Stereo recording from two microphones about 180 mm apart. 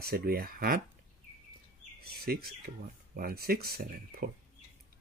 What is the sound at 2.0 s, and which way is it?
Speech, 60° right (ahead or behind).